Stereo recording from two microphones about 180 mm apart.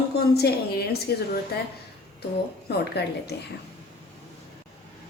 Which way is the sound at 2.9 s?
65° left (ahead or behind).